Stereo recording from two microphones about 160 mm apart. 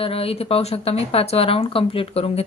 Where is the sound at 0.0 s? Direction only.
35° left (ahead or behind).